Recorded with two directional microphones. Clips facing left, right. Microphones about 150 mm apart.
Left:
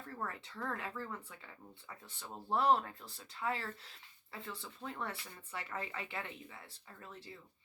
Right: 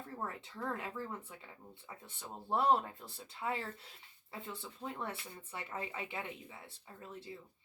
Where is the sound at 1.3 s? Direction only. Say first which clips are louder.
Right 1 dB; 20° right (ahead or behind).